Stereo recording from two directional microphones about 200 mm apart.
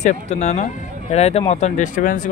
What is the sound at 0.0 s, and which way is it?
Speech, 35° left (ahead or behind).